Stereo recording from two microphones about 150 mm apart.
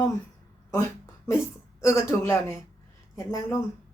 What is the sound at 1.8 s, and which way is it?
Speech, 20° left (ahead or behind).